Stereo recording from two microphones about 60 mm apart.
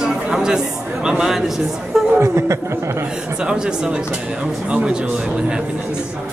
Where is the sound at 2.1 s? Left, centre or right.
Right.